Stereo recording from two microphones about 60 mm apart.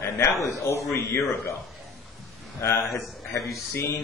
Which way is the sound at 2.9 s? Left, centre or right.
Left.